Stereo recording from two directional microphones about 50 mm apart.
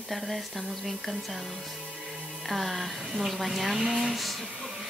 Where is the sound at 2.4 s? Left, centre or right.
Centre.